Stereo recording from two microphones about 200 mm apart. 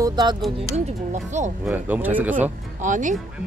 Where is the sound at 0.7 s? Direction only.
35° right (ahead or behind).